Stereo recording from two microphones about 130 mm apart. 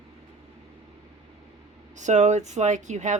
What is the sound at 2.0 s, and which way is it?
Speech, 65° right (ahead or behind).